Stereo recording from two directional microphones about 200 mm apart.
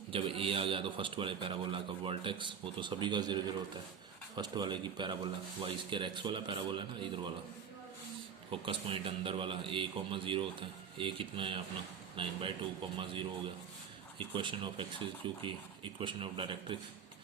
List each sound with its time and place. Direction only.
0.1 s a man's voice: 25° right (ahead or behind)
8.4 s a man's voice: 25° right (ahead or behind)
14.2 s a man's voice: 25° right (ahead or behind)